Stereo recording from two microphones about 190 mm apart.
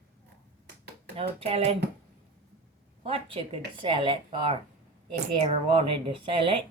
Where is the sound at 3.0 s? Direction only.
30° right (ahead or behind).